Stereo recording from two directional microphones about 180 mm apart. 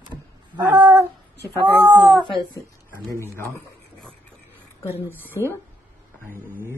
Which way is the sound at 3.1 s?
15° left (ahead or behind).